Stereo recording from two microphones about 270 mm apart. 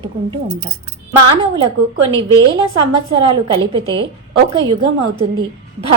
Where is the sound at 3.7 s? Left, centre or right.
Centre.